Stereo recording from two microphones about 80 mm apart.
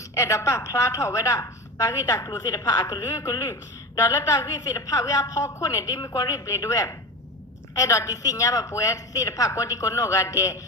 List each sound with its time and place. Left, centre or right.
0.1 s a woman's voice: left
2.4 s a woman's voice: left
3.1 s a woman's voice: left
3.9 s a woman's voice: left